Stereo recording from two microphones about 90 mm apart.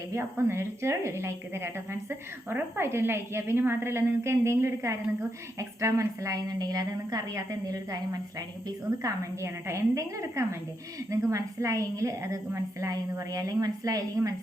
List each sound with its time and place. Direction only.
0.1 s a woman's voice: 30° right (ahead or behind)